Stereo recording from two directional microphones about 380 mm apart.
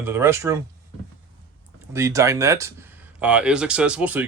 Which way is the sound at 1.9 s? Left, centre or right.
Centre.